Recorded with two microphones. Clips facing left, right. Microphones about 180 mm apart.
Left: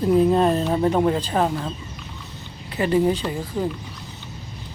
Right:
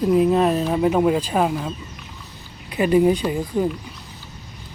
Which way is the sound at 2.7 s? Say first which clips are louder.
Right 3 dB; 15° right (ahead or behind).